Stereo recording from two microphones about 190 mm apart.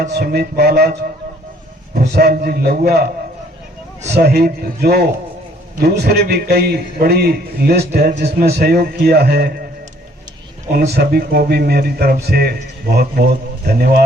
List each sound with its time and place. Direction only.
0.0 s speech: 55° right (ahead or behind)
2.1 s a man's voice: 55° right (ahead or behind)
4.1 s speech: 55° right (ahead or behind)
10.7 s speech: 55° right (ahead or behind)